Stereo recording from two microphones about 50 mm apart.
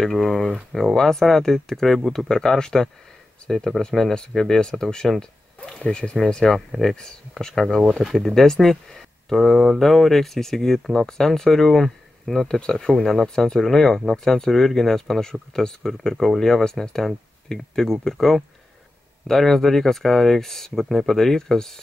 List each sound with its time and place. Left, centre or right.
0.0 s speech: centre
6.7 s speech: centre
7.0 s speech: centre